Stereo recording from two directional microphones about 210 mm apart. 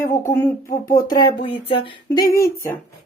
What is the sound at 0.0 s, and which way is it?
Speech, 15° left (ahead or behind).